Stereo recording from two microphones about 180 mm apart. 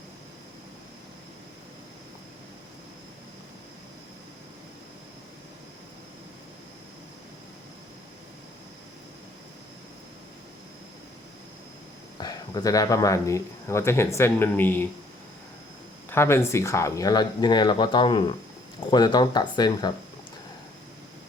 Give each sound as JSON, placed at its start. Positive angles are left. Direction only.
{"t": 12.1, "sound": "speech", "side_deg": 20}
{"t": 16.0, "sound": "speech", "side_deg": 15}